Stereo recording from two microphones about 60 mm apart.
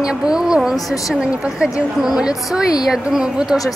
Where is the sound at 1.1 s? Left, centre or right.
Centre.